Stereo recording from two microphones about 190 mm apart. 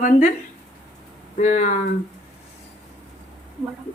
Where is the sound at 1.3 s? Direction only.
40° left (ahead or behind).